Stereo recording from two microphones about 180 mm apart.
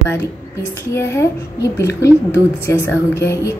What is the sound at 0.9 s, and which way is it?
A woman's voice, 15° left (ahead or behind).